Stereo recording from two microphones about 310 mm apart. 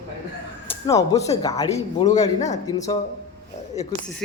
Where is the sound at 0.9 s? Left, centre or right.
Centre.